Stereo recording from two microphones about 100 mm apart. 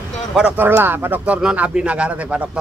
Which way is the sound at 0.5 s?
20° right (ahead or behind).